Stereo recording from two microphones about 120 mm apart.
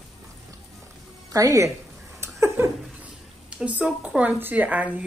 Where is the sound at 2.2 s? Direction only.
20° right (ahead or behind).